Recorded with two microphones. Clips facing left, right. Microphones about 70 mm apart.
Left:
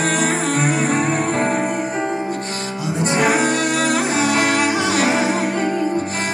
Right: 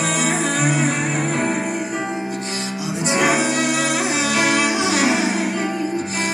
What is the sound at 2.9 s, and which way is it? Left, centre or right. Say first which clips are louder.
Music: left 1 dB; left.